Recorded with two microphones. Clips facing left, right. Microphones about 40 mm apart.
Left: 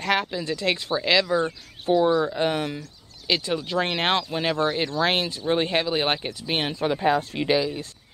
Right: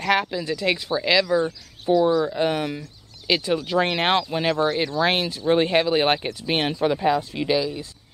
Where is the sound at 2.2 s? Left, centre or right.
Centre.